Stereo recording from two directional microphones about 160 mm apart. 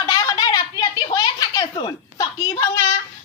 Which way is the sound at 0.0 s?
25° left (ahead or behind).